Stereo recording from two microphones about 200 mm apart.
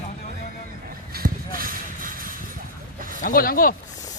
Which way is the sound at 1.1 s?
45° right (ahead or behind).